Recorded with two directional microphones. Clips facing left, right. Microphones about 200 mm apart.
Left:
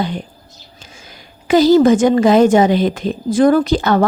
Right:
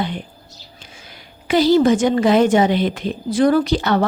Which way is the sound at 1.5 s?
45° left (ahead or behind).